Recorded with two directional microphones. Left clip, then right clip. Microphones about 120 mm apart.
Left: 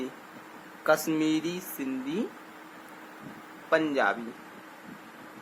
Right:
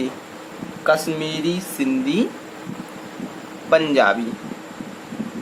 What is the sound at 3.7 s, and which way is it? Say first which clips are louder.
Speech: right 10 dB; 35° left (ahead or behind).